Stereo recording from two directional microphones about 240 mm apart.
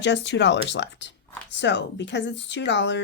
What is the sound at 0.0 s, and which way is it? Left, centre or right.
Speech, left.